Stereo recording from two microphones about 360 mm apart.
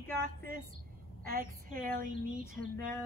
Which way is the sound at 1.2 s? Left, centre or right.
Right.